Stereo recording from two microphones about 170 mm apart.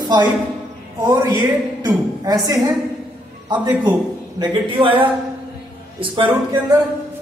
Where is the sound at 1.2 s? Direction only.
20° right (ahead or behind).